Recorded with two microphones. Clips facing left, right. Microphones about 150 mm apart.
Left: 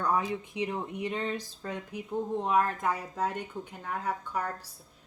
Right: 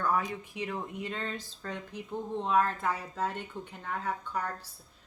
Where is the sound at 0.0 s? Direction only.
20° left (ahead or behind).